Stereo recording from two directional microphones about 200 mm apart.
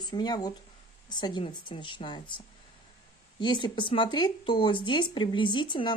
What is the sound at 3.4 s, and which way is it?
Speech, 25° left (ahead or behind).